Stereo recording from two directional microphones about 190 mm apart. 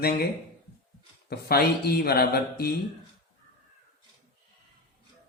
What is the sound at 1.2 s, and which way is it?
A man's voice, 55° left (ahead or behind).